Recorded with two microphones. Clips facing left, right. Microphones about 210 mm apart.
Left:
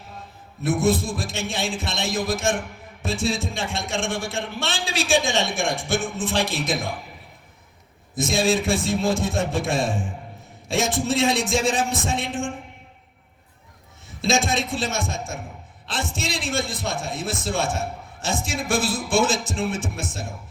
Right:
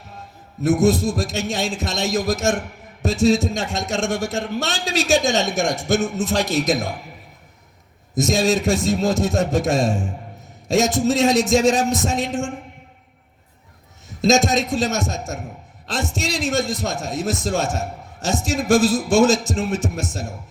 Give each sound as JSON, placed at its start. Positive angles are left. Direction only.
{"t": 0.6, "sound": "a man's voice", "side_deg": -40}
{"t": 8.1, "sound": "a man's voice", "side_deg": -40}
{"t": 14.1, "sound": "a man's voice", "side_deg": -40}